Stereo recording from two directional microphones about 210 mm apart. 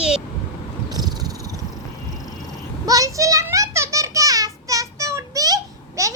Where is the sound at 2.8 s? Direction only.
15° right (ahead or behind).